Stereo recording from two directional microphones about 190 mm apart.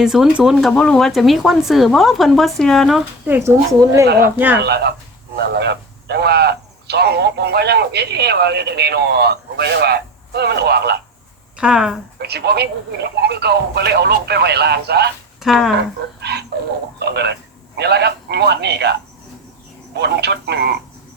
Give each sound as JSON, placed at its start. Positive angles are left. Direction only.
{"t": 0.0, "sound": "speech", "side_deg": -5}
{"t": 3.2, "sound": "speech", "side_deg": -10}
{"t": 4.0, "sound": "speech", "side_deg": -55}
{"t": 4.4, "sound": "speech", "side_deg": -10}
{"t": 4.6, "sound": "speech", "side_deg": -60}
{"t": 11.5, "sound": "speech", "side_deg": -5}
{"t": 12.2, "sound": "speech", "side_deg": -60}
{"t": 15.4, "sound": "speech", "side_deg": 0}
{"t": 16.2, "sound": "dog", "side_deg": -60}
{"t": 17.0, "sound": "a man's voice", "side_deg": -60}